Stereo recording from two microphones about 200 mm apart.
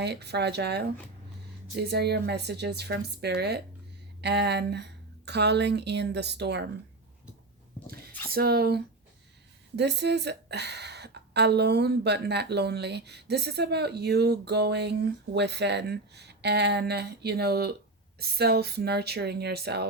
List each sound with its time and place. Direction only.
0.0 s a woman's voice: 55° right (ahead or behind)
7.9 s a sound: 50° right (ahead or behind)
8.3 s a woman's voice: 50° right (ahead or behind)